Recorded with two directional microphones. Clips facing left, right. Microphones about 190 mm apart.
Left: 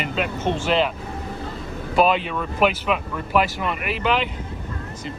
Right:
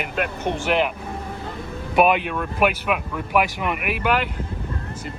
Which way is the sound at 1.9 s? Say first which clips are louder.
Right 1 dB; 15° right (ahead or behind).